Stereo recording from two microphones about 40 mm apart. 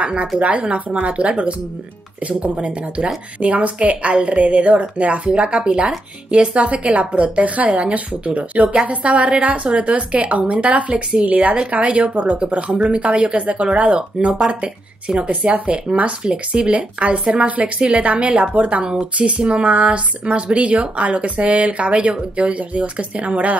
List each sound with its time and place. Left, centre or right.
0.0 s speech: right
14.2 s speech: right